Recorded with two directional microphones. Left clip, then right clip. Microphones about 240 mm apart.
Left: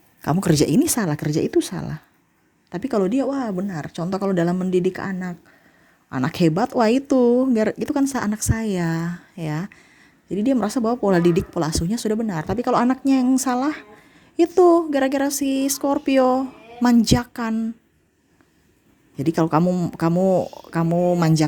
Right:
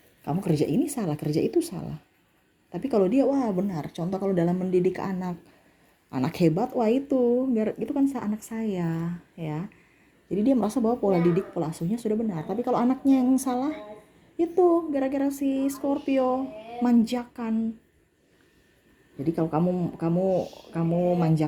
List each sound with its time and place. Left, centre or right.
0.2 s speech: left
19.1 s speech: left